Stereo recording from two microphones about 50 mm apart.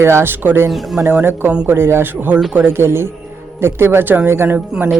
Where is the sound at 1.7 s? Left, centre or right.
Right.